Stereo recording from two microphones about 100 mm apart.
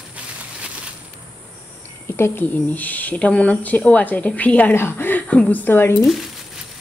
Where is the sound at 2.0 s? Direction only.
25° left (ahead or behind).